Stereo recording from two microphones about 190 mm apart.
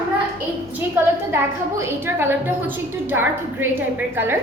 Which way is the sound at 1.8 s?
15° right (ahead or behind).